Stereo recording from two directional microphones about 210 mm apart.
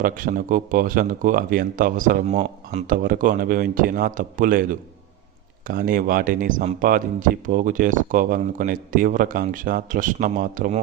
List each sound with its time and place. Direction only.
0.0 s speech: 40° right (ahead or behind)